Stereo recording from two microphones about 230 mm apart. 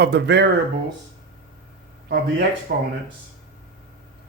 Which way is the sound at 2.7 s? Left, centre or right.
Right.